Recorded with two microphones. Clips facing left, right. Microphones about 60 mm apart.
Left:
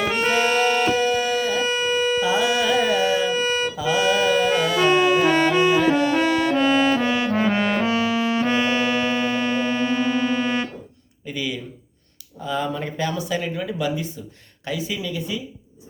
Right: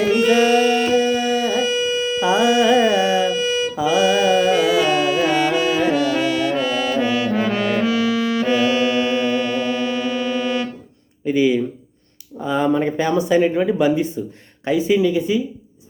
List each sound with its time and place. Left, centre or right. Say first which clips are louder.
0.2 s music: right 4 dB; left
0.9 s music: right 3 dB; right
1.6 s a sound: right 1 dB; left
2.2 s music: right 5 dB; right
3.3 s music: right 2 dB; left
3.8 s music: right 5 dB; right
4.8 s music: even; left
11.3 s a sound: right 12 dB; right
12.4 s speech: right 7 dB; right